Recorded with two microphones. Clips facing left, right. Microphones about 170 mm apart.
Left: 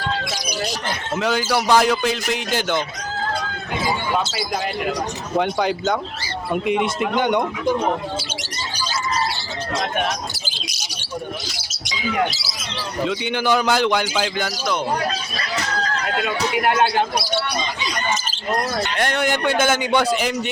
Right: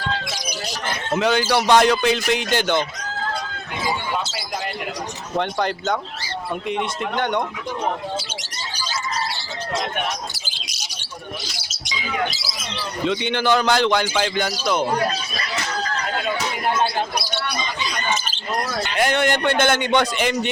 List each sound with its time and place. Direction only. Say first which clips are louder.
1.1 s speech: right 2 dB; 5° left (ahead or behind)
5.4 s speech: left 2 dB; 5° left (ahead or behind)
13.1 s speech: right 2 dB; 10° left (ahead or behind)
16.2 s speech: left 5 dB; 70° left (ahead or behind)
18.9 s speech: right 4 dB; centre (ahead or behind)